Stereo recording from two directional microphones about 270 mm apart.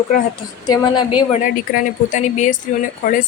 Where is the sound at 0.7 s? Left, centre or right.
Centre.